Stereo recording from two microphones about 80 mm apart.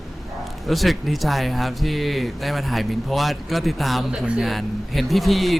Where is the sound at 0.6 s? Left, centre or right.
Centre.